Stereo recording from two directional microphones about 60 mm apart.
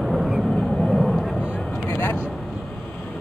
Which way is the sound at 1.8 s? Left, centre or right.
Left.